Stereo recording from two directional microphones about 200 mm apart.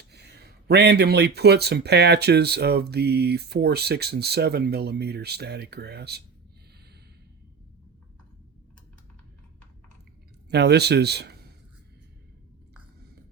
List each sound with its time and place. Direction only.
0.1 s speech: 55° right (ahead or behind)
10.5 s a man's voice: 55° right (ahead or behind)